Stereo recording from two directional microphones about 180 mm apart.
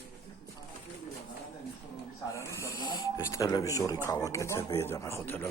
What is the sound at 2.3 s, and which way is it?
Snoring, 15° left (ahead or behind).